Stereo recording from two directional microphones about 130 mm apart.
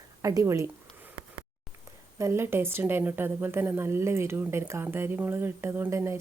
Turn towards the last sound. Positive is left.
turn(degrees=-20)  # may be behind; listen again after turning